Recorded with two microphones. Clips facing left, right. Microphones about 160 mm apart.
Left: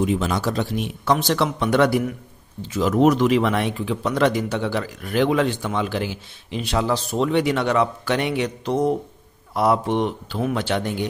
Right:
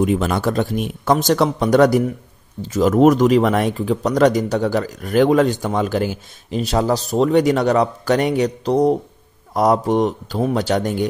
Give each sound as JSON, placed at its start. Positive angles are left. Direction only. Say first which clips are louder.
{"t": 0.0, "sound": "speech", "louder": "right 4 dB", "side_deg": -55}